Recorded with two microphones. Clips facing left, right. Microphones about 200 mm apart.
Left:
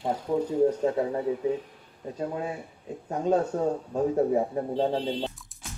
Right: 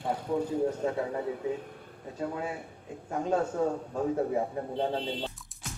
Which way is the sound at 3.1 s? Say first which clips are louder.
Left 5 dB; 20° left (ahead or behind).